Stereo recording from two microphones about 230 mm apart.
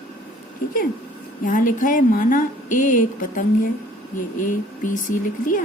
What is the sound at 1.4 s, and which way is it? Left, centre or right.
A woman's voice, left.